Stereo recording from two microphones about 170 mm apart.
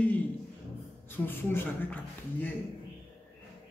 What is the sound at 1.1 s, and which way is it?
Speech, 10° left (ahead or behind).